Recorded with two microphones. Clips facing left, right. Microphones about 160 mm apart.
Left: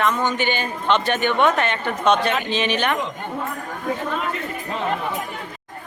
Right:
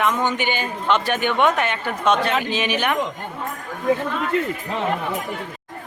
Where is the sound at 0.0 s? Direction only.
15° right (ahead or behind).